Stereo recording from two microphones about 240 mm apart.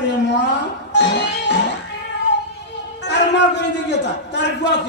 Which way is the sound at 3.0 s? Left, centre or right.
Left.